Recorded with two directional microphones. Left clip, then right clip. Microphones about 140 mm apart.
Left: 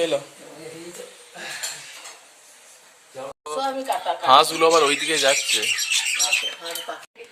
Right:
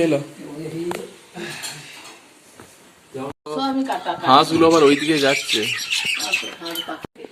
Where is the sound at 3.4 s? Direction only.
10° left (ahead or behind).